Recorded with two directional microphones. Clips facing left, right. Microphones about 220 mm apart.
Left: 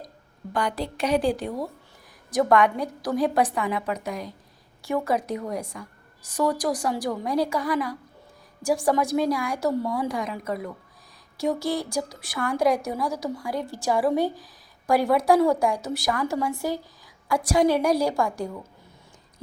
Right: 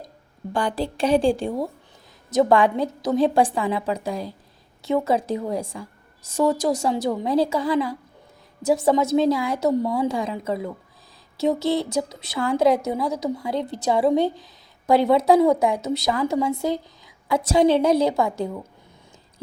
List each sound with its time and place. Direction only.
0.5 s a woman's voice: 30° right (ahead or behind)